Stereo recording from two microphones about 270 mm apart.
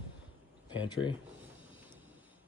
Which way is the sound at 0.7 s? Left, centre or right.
Centre.